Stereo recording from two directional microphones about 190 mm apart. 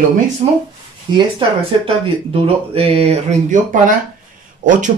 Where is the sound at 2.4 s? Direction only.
30° right (ahead or behind).